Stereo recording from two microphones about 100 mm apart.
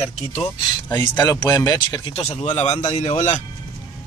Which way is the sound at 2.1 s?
90° left.